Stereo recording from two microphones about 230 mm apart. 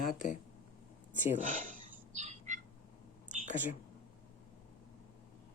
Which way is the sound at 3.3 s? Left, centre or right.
Right.